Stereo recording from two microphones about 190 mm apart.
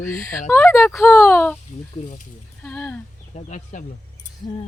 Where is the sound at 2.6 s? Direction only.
10° left (ahead or behind).